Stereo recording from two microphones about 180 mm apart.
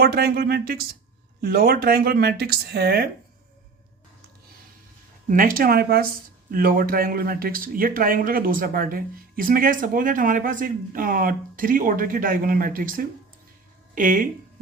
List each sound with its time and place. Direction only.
0.0 s speech: 60° right (ahead or behind)
5.3 s speech: 50° right (ahead or behind)